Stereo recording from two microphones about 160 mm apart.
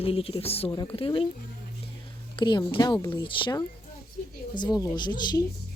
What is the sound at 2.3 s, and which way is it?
Speech, 30° left (ahead or behind).